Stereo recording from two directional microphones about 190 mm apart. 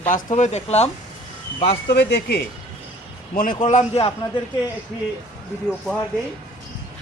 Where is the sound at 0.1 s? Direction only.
40° left (ahead or behind).